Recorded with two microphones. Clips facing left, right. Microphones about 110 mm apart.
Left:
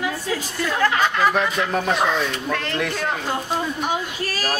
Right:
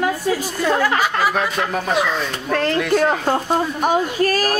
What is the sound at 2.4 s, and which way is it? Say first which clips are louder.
A woman's voice: right 6 dB; 40° right (ahead or behind).